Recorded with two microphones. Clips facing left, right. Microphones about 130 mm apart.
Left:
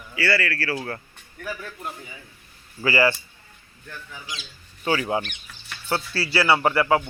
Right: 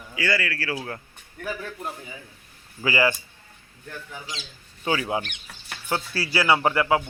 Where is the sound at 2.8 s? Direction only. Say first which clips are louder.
Left 2 dB; 15° right (ahead or behind).